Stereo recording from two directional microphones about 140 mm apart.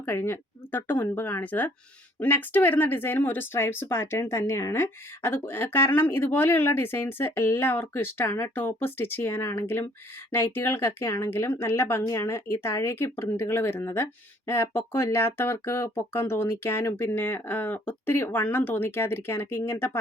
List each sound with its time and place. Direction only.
0.0 s speech: 15° left (ahead or behind)